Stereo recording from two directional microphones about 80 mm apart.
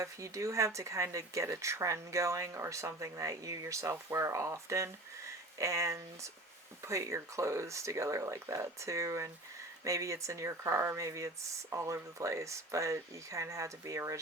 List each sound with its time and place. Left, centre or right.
0.0 s speech: right